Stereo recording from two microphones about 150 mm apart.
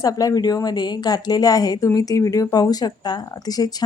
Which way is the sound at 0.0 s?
25° left (ahead or behind).